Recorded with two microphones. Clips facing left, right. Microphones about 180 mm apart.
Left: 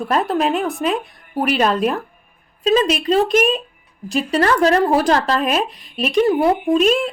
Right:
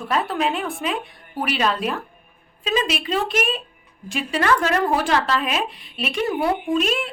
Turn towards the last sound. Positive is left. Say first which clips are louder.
# left 6 dB
turn(degrees=40)  # may be behind; listen again after turning